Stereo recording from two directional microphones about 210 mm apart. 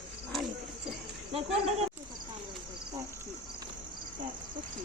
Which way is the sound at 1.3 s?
30° right (ahead or behind).